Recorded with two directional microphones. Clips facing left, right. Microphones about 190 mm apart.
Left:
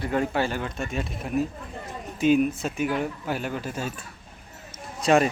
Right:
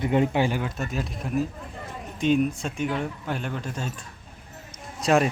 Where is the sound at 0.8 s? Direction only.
Centre (ahead or behind).